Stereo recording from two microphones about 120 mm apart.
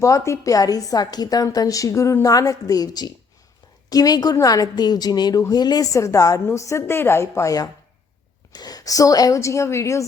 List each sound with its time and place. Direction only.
0.0 s a woman's voice: 25° left (ahead or behind)